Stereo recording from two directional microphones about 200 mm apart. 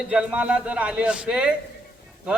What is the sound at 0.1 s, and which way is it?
Speech, 5° right (ahead or behind).